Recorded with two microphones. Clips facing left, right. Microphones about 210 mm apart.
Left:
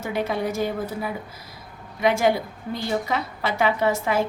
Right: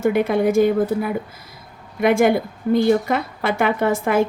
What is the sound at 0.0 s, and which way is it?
A woman's voice, 55° right (ahead or behind).